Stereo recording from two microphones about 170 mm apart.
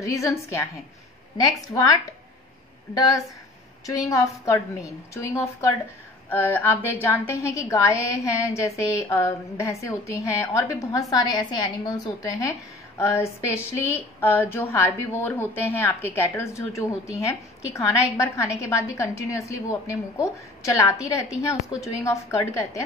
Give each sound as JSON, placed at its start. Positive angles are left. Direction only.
{"t": 0.0, "sound": "a woman's voice", "side_deg": 20}
{"t": 3.8, "sound": "a woman's voice", "side_deg": 20}